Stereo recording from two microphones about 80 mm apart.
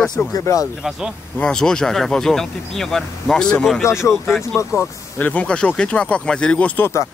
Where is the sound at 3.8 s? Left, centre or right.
Left.